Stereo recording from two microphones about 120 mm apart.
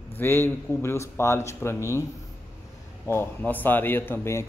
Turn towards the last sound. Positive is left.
turn(degrees=20)  # may be behind; listen again after turning